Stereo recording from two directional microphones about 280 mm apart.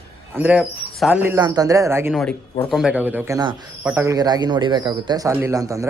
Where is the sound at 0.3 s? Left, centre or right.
Centre.